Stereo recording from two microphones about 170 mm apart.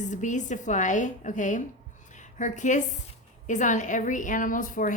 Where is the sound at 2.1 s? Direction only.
45° left (ahead or behind).